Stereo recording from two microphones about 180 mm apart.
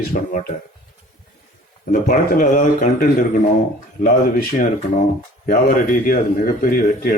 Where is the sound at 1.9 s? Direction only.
50° left (ahead or behind).